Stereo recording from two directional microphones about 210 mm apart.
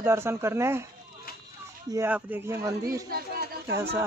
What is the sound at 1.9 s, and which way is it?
Speech, 10° right (ahead or behind).